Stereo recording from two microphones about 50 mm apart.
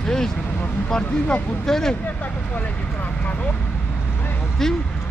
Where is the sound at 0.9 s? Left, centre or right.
Left.